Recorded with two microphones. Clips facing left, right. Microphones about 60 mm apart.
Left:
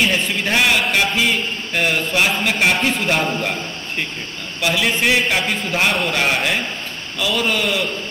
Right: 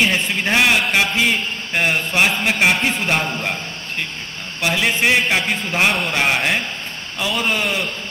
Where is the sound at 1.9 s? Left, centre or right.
Right.